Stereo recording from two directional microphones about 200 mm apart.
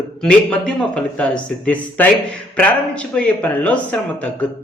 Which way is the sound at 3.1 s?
5° left (ahead or behind).